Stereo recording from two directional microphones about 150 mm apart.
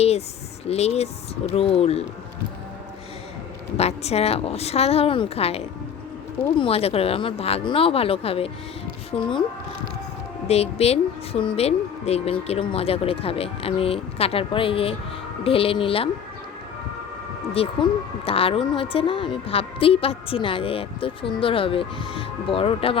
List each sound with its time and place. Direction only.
0.7 s a woman's voice: 45° left (ahead or behind)
3.8 s a woman's voice: 45° left (ahead or behind)
10.5 s a woman's voice: 45° left (ahead or behind)
17.5 s a woman's voice: 40° left (ahead or behind)